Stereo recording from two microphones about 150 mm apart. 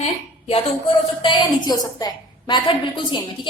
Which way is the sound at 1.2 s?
30° left (ahead or behind).